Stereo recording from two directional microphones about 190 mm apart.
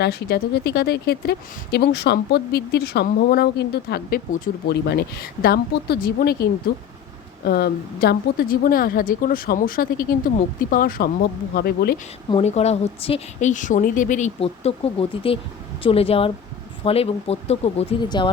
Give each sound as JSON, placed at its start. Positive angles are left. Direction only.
{"t": 0.0, "sound": "a woman's voice", "side_deg": 60}
{"t": 12.3, "sound": "a woman's voice", "side_deg": 35}